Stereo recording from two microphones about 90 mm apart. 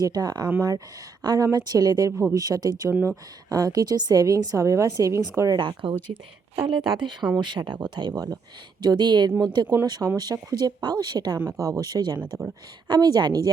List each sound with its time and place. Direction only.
0.0 s a woman's voice: 45° right (ahead or behind)
5.5 s speech: 65° right (ahead or behind)
11.5 s speech: 40° right (ahead or behind)
12.2 s speech: 15° right (ahead or behind)
12.9 s speech: 50° right (ahead or behind)